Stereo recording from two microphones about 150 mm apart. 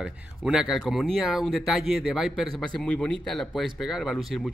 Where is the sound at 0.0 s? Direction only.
5° right (ahead or behind).